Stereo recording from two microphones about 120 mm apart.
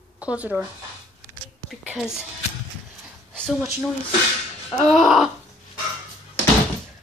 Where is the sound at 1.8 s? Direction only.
5° right (ahead or behind).